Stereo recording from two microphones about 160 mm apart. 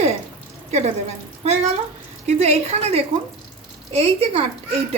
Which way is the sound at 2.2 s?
40° right (ahead or behind).